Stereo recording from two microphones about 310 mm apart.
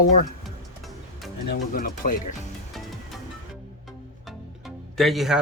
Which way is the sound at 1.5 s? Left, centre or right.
Left.